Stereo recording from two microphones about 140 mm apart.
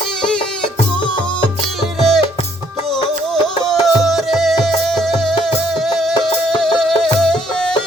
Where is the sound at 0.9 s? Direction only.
35° left (ahead or behind).